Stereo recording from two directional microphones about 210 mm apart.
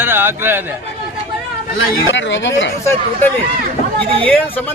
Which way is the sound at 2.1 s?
60° left (ahead or behind).